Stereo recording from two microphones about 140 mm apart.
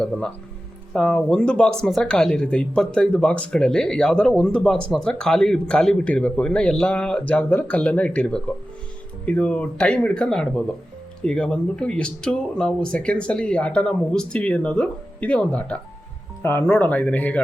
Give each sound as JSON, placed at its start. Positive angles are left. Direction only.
{"t": 0.9, "sound": "speech", "side_deg": 5}